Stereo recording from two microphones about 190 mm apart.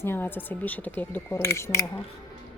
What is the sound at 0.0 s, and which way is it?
A woman's voice, 10° left (ahead or behind).